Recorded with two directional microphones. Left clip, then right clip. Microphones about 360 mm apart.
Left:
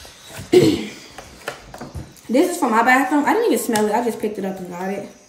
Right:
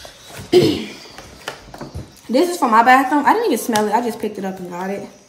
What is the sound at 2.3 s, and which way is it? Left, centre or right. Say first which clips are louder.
A woman's voice: right 2 dB; centre.